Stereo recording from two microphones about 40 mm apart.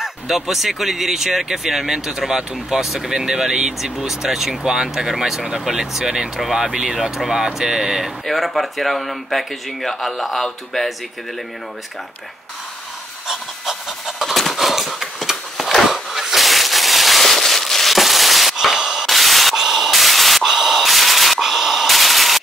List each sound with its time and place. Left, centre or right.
0.0 s speech: centre
7.0 s speech: centre
8.3 s speech: centre
13.3 s pant: centre
14.3 s horse: centre
19.5 s static: centre